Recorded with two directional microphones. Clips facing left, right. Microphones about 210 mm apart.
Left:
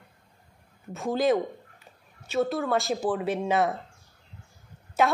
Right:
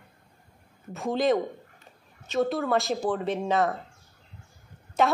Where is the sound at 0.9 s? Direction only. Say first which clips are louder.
Even; centre (ahead or behind).